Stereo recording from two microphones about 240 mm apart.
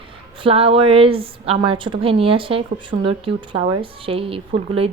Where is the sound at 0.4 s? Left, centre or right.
Right.